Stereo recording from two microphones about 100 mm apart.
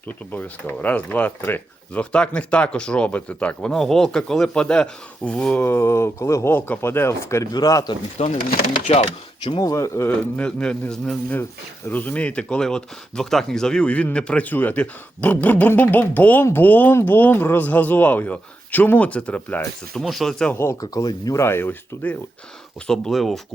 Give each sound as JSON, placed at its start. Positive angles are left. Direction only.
{"t": 0.3, "sound": "speech", "side_deg": 15}
{"t": 5.6, "sound": "speech", "side_deg": 25}
{"t": 7.5, "sound": "speech", "side_deg": 40}
{"t": 8.2, "sound": "speech", "side_deg": 70}
{"t": 9.6, "sound": "speech", "side_deg": 35}
{"t": 10.1, "sound": "speech", "side_deg": 15}
{"t": 20.0, "sound": "speech", "side_deg": 0}
{"t": 20.5, "sound": "speech", "side_deg": 25}
{"t": 20.8, "sound": "speech", "side_deg": 45}
{"t": 21.3, "sound": "speech", "side_deg": 25}
{"t": 22.9, "sound": "speech", "side_deg": 5}